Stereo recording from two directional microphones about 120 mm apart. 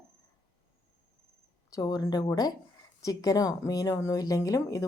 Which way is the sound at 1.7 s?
30° left (ahead or behind).